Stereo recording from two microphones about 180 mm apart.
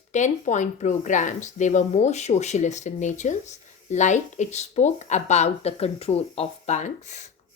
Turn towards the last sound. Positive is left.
turn(degrees=40)  # may be behind; listen again after turning